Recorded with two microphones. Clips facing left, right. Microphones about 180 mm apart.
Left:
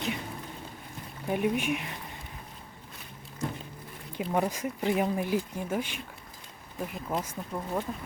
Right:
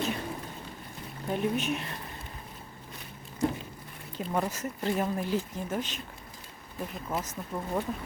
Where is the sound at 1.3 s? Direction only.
10° left (ahead or behind).